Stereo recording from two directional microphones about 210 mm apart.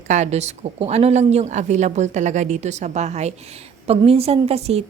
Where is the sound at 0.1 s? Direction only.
35° right (ahead or behind).